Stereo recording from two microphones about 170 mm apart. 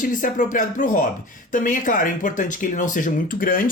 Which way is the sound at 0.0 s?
50° left (ahead or behind).